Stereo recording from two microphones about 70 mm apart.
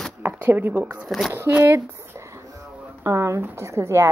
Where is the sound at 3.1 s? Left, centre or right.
Right.